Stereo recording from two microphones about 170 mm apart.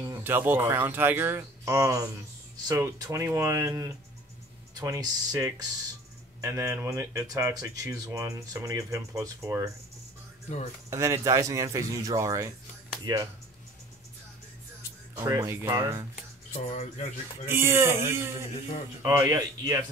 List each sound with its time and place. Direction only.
0.0 s speech: 15° right (ahead or behind)
10.9 s speech: 20° right (ahead or behind)
15.1 s speech: 15° right (ahead or behind)
16.6 s speech: 40° left (ahead or behind)
17.5 s speech: 15° right (ahead or behind)